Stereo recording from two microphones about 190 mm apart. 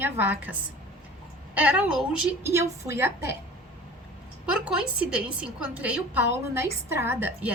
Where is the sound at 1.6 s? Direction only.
5° right (ahead or behind).